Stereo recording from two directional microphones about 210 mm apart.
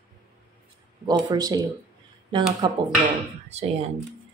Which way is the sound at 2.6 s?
20° right (ahead or behind).